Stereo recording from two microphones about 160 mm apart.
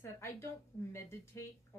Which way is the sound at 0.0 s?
15° left (ahead or behind).